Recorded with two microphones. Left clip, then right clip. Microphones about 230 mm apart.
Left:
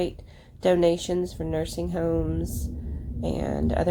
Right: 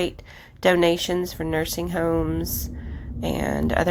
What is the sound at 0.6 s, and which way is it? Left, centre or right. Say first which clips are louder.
Speech: right 2 dB; centre.